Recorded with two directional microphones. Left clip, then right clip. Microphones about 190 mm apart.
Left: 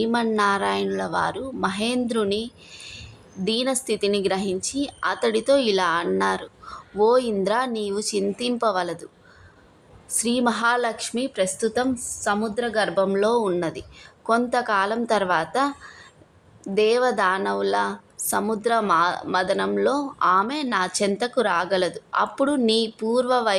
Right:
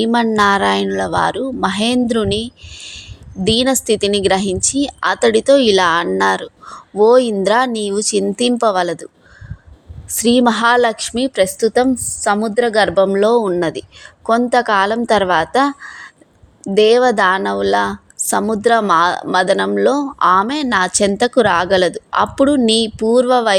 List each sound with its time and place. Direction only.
0.0 s a woman's voice: 35° right (ahead or behind)
10.1 s a woman's voice: 35° right (ahead or behind)